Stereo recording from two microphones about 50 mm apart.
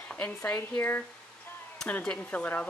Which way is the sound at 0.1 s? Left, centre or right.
Left.